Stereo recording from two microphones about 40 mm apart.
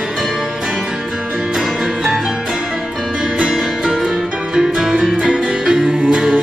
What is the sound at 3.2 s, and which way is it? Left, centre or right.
Music, centre.